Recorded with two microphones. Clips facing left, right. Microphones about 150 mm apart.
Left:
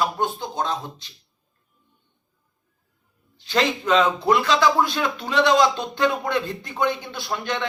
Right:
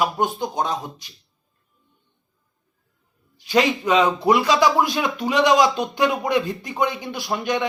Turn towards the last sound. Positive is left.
turn(degrees=-15)  # may be behind; listen again after turning